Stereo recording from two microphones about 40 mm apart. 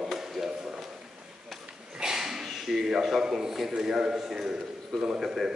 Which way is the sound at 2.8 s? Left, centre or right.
Centre.